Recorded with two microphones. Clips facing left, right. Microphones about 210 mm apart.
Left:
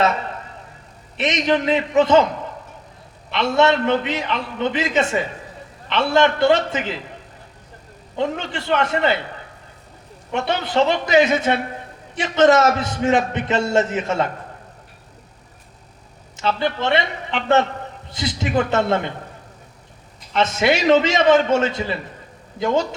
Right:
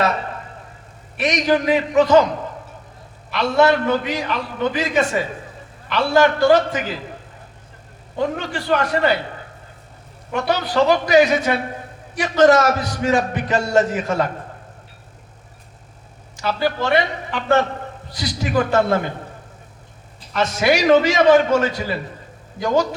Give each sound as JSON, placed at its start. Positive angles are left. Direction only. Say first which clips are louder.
{"t": 1.1, "sound": "a man's voice", "louder": "right 1 dB", "side_deg": 25}
{"t": 3.2, "sound": "a man's voice", "louder": "right 1 dB", "side_deg": 25}
{"t": 8.2, "sound": "a man's voice", "louder": "right 1 dB", "side_deg": 25}
{"t": 10.3, "sound": "a man's voice", "louder": "right 1 dB", "side_deg": 25}
{"t": 16.4, "sound": "a man's voice", "louder": "even", "side_deg": 25}
{"t": 20.3, "sound": "a man's voice", "louder": "even", "side_deg": 25}